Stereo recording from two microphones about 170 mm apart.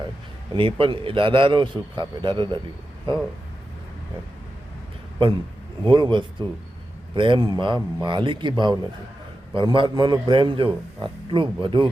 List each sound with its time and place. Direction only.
0.5 s a man's voice: 30° right (ahead or behind)
5.8 s a man's voice: 30° right (ahead or behind)